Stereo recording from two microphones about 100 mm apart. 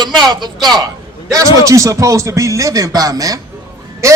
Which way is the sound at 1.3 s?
35° right (ahead or behind).